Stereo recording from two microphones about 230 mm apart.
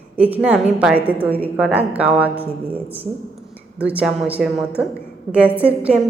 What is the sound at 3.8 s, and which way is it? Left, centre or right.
A woman's voice, centre.